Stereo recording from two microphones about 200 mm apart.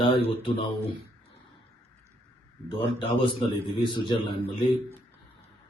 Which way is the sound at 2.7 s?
25° left (ahead or behind).